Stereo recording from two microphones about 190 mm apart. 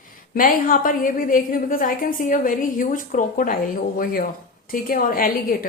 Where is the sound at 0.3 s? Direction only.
45° left (ahead or behind).